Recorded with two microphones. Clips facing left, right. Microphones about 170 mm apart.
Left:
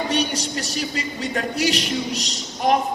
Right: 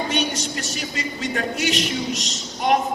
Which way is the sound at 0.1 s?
35° left (ahead or behind).